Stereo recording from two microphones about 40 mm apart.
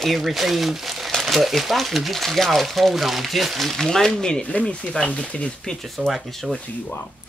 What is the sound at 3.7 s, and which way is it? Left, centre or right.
Speech, centre.